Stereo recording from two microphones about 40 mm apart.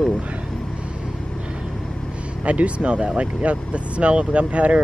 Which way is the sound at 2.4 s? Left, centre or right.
Right.